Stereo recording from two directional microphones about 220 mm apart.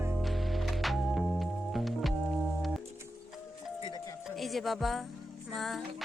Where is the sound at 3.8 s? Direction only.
20° left (ahead or behind).